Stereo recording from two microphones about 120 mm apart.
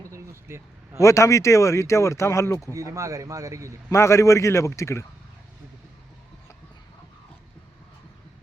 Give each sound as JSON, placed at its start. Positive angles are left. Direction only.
{"t": 0.0, "sound": "vehicle", "side_deg": -25}
{"t": 0.9, "sound": "speech", "side_deg": 25}
{"t": 2.7, "sound": "a man's voice", "side_deg": -25}
{"t": 3.8, "sound": "speech", "side_deg": 25}